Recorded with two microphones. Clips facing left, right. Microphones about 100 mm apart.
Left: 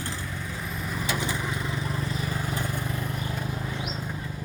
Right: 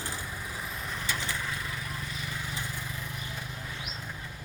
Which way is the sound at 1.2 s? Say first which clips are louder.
Left 5 dB; 20° left (ahead or behind).